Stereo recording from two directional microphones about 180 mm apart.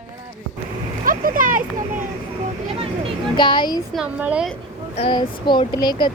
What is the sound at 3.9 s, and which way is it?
Speech, 5° right (ahead or behind).